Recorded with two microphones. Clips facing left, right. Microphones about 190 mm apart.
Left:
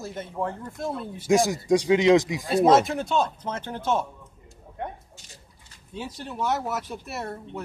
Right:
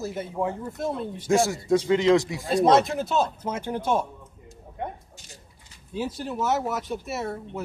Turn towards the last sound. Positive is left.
turn(degrees=0)  # may be behind; listen again after turning